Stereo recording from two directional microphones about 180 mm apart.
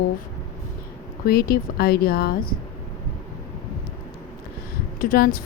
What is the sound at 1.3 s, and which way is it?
A woman's voice, 55° left (ahead or behind).